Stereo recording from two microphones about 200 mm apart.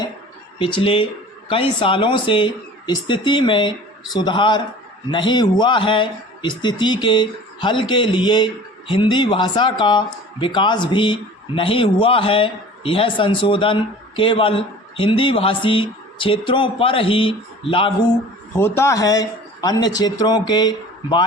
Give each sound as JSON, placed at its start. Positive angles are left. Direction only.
{"t": 0.6, "sound": "speech", "side_deg": 25}
{"t": 18.5, "sound": "speech", "side_deg": 10}